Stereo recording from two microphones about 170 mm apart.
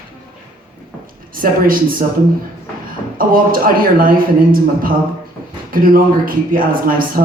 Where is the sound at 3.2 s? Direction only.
55° right (ahead or behind).